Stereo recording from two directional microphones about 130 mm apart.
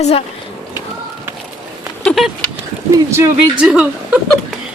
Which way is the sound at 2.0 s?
Centre (ahead or behind).